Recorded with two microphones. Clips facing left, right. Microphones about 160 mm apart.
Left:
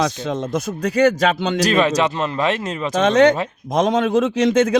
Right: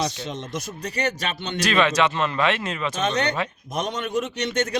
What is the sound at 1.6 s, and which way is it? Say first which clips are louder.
A man's voice: left 2 dB; 40° left (ahead or behind).